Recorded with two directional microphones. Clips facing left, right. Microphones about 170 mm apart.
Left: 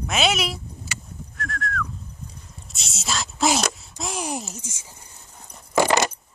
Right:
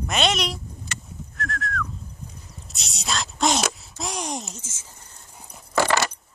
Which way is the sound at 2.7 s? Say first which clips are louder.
Even; centre (ahead or behind).